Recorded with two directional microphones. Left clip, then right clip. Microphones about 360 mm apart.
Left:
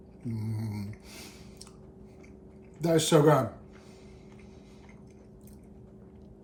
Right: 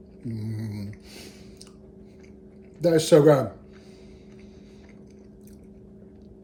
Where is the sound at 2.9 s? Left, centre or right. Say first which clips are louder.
Right 5 dB; right.